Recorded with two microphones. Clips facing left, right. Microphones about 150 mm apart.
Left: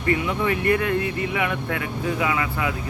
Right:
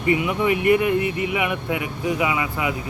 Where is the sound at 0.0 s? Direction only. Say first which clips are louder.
Right 2 dB; 15° right (ahead or behind).